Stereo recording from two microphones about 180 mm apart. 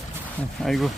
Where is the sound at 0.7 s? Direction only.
Centre (ahead or behind).